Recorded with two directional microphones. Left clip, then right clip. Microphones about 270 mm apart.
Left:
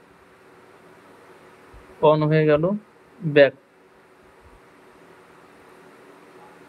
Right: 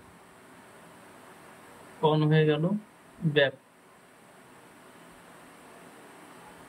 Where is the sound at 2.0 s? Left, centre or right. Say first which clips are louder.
Left 7 dB; centre.